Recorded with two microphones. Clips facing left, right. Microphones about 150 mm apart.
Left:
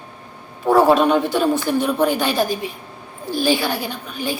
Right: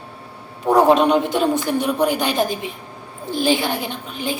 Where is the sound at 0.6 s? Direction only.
15° right (ahead or behind).